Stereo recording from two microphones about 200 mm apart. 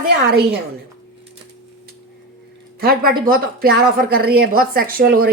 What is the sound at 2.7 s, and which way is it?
Speech, 45° right (ahead or behind).